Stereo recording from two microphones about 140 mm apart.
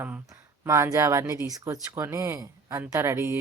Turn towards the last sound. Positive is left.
turn(degrees=-15)  # may be behind; listen again after turning